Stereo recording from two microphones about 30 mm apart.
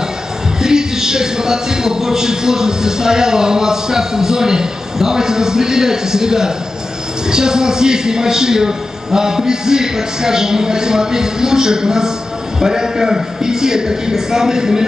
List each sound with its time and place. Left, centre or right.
0.6 s speech: right